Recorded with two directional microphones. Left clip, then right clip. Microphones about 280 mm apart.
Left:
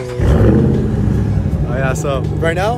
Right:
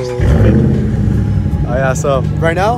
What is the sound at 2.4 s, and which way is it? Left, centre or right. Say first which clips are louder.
Speech: right 1 dB; centre.